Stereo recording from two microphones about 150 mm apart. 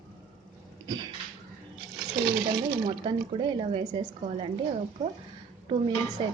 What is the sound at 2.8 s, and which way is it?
Speech, 30° right (ahead or behind).